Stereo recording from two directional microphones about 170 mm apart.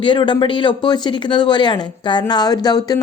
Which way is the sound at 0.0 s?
25° left (ahead or behind).